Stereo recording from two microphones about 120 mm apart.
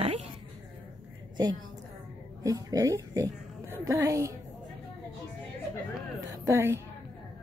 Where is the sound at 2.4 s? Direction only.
30° right (ahead or behind).